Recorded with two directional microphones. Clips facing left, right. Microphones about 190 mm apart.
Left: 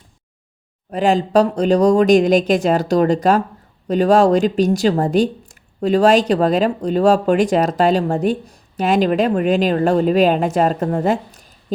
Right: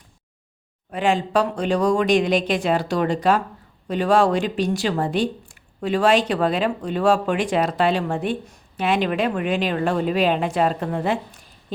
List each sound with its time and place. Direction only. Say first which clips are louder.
0.9 s speech: left 5 dB; 40° left (ahead or behind)